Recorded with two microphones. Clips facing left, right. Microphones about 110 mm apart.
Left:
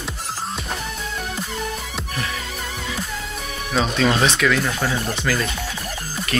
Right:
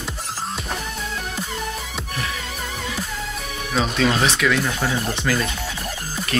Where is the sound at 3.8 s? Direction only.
Centre (ahead or behind).